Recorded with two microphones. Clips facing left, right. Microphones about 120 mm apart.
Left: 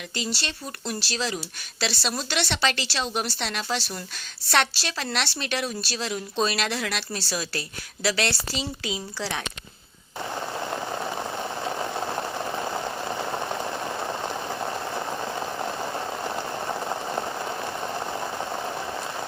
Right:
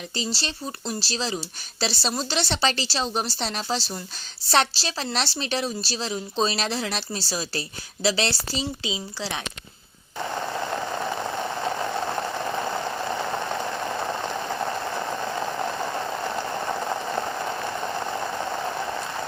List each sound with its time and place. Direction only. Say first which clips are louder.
0.1 s a woman's voice: even; 30° right (ahead or behind)
8.8 s a woman's voice: even; 20° right (ahead or behind)